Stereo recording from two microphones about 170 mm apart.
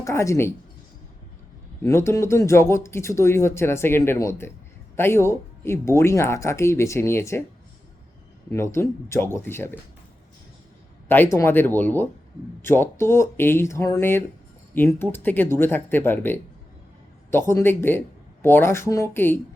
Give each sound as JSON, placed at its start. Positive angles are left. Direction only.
{"t": 0.0, "sound": "speech", "side_deg": 15}
{"t": 1.8, "sound": "speech", "side_deg": 15}
{"t": 8.4, "sound": "speech", "side_deg": 15}
{"t": 11.1, "sound": "speech", "side_deg": 15}